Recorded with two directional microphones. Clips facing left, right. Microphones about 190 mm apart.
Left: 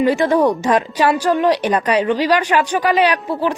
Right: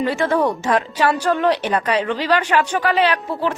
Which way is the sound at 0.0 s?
15° left (ahead or behind).